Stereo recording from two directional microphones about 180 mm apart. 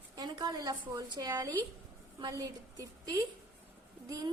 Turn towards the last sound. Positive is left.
turn(degrees=-20)  # may be behind; listen again after turning